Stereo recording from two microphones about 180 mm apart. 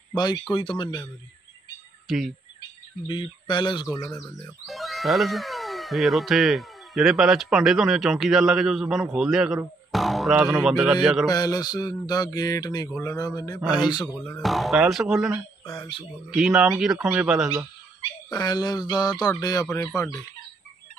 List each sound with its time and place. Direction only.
0.1 s speech: 25° left (ahead or behind)
2.0 s speech: centre (ahead or behind)
3.1 s speech: 25° left (ahead or behind)
4.6 s speech: centre (ahead or behind)
11.2 s speech: 20° left (ahead or behind)
13.6 s a man's voice: 5° right (ahead or behind)
18.3 s speech: 20° left (ahead or behind)